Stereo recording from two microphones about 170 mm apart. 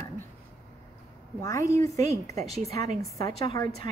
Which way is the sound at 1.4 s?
20° left (ahead or behind).